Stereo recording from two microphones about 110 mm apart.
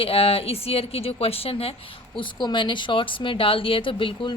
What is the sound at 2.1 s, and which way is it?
A woman's voice, 45° left (ahead or behind).